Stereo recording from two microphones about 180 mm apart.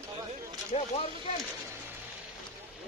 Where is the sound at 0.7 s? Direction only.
35° left (ahead or behind).